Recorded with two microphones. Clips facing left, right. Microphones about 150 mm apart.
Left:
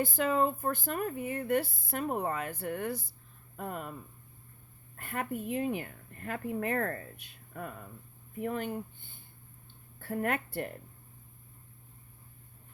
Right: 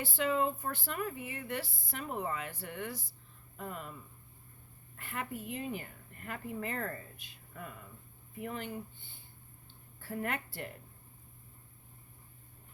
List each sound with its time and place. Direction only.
0.0 s speech: 45° left (ahead or behind)
4.9 s speech: 50° left (ahead or behind)